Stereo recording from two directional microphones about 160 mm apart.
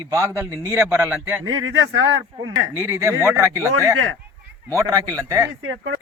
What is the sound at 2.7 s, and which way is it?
A man's voice, 15° right (ahead or behind).